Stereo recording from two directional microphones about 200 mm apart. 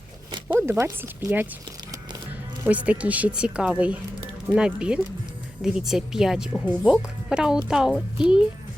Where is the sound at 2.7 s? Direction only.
5° right (ahead or behind).